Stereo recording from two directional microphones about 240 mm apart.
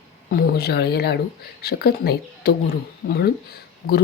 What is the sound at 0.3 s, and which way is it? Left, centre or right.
Speech, left.